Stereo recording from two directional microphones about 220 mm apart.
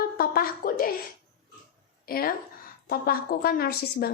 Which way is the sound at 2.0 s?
45° left (ahead or behind).